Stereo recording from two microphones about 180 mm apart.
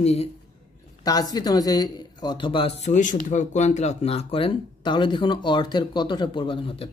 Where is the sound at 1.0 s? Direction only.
20° left (ahead or behind).